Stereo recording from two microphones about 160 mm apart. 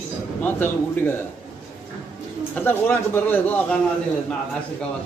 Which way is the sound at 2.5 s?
10° left (ahead or behind).